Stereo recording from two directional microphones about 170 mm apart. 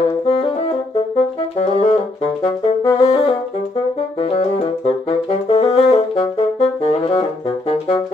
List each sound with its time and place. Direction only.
1.1 s brass instrument: 40° left (ahead or behind)
2.8 s saxophone: 20° left (ahead or behind)
4.2 s saxophone: 35° left (ahead or behind)